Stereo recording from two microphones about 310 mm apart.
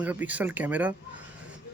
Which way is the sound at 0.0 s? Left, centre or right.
Centre.